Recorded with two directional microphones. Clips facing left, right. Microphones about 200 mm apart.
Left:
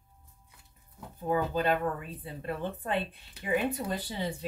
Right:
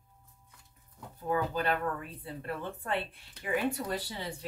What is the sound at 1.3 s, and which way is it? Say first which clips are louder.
Speech: left 3 dB; 20° left (ahead or behind).